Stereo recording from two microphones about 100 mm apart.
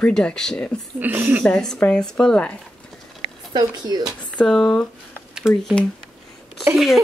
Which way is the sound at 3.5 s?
45° right (ahead or behind).